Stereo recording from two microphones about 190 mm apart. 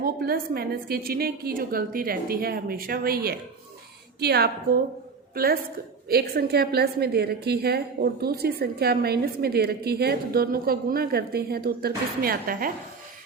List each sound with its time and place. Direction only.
0.0 s a woman's voice: 55° right (ahead or behind)